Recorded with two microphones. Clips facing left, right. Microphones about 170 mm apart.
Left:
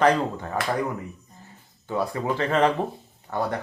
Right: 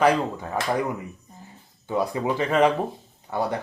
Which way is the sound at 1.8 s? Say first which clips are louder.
Right 2 dB; 15° right (ahead or behind).